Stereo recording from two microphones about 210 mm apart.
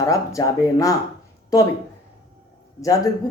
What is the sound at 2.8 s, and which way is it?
Speech, 15° left (ahead or behind).